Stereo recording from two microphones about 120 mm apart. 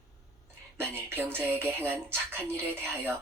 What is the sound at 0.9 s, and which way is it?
A woman's voice, 20° right (ahead or behind).